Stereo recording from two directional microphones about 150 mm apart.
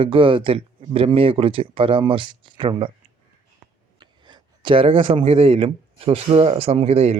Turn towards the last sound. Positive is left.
turn(degrees=-45)  # may be behind; listen again after turning